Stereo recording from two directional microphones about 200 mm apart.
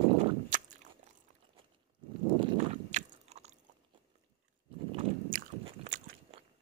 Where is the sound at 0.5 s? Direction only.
40° right (ahead or behind).